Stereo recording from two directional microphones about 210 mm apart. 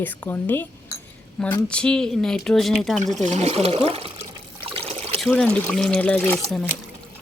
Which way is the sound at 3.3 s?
30° right (ahead or behind).